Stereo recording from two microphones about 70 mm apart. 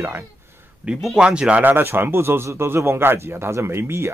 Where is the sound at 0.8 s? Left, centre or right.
Centre; by 4.1 s right.